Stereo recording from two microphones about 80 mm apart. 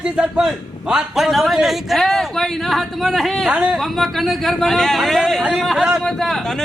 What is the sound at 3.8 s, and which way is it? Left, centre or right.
A man's voice, centre.